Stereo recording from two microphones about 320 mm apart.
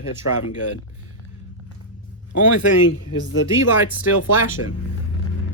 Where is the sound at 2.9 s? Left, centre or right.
Left.